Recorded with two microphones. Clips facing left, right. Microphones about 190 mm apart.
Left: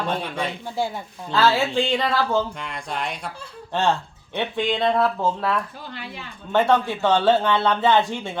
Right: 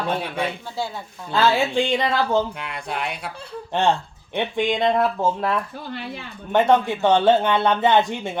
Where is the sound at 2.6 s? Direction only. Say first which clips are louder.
Right 1 dB; 5° right (ahead or behind).